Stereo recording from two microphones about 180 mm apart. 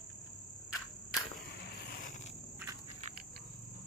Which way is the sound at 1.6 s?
60° left (ahead or behind).